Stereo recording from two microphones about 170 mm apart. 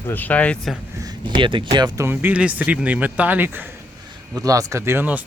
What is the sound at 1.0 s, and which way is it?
Speech, 25° right (ahead or behind).